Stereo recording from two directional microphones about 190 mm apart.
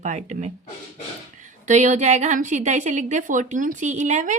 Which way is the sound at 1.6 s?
40° right (ahead or behind).